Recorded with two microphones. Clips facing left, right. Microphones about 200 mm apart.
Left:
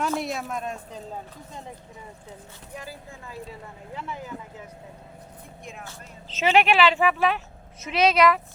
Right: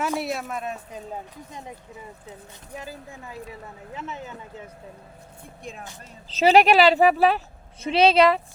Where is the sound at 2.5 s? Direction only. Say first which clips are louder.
Right 2 dB; 20° right (ahead or behind).